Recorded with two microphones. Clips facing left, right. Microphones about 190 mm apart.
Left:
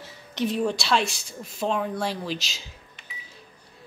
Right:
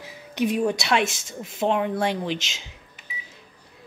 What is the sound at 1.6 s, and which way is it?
Speech, 25° right (ahead or behind).